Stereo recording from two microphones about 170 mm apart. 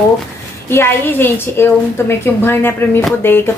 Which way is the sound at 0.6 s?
15° left (ahead or behind).